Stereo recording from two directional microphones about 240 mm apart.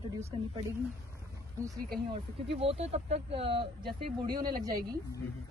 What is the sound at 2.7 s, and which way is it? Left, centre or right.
Speech, right.